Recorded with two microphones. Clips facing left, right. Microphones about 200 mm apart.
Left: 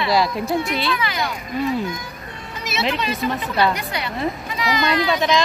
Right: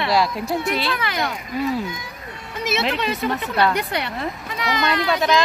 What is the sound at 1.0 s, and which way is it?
Speech, 55° right (ahead or behind).